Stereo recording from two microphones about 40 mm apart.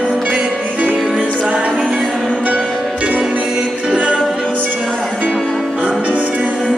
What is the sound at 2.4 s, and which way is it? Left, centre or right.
Music, right.